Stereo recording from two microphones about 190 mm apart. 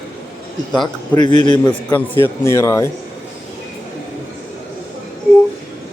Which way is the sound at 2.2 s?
15° left (ahead or behind).